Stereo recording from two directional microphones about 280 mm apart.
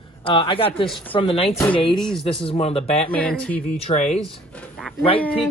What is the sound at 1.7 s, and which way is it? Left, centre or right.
Speech, centre.